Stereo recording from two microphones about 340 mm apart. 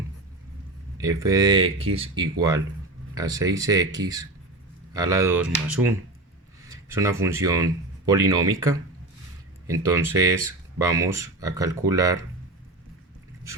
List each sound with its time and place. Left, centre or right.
0.9 s speech: centre